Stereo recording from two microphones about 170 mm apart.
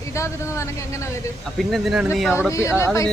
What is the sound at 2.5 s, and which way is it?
Speech, 15° left (ahead or behind).